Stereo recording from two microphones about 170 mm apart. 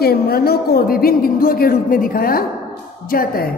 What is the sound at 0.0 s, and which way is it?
A woman's voice, 65° left (ahead or behind).